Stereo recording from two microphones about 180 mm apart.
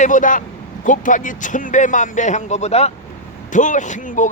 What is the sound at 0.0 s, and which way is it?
Speech, 45° left (ahead or behind).